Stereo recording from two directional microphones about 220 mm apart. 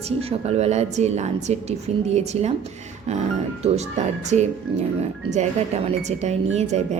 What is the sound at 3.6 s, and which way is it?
Speech, 30° right (ahead or behind).